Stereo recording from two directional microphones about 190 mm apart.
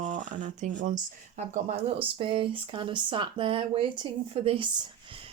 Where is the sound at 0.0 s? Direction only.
40° right (ahead or behind).